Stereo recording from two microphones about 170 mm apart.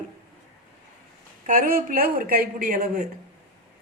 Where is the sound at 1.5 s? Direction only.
55° right (ahead or behind).